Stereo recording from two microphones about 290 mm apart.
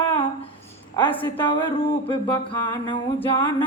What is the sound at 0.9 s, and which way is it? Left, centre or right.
Speech, centre.